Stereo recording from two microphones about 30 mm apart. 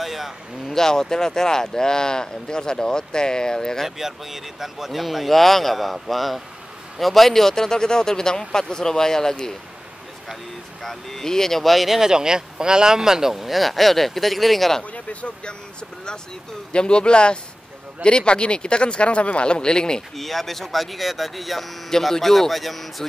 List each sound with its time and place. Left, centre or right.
0.0 s a sound: centre
0.7 s speech: centre
4.0 s speech: centre
10.8 s speech: centre
12.0 s speech: right; by 14.7 s centre
14.8 s speech: left
16.7 s speech: left
19.5 s speech: left
20.2 s speech: centre